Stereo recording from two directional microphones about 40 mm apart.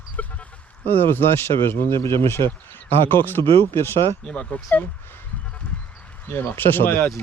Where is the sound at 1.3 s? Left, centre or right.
Left.